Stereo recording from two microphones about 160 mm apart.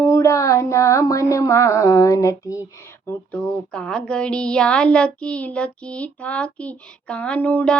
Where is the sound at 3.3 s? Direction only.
5° left (ahead or behind).